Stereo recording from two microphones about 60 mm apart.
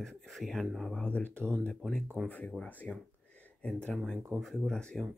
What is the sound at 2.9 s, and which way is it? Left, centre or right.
Speech, centre.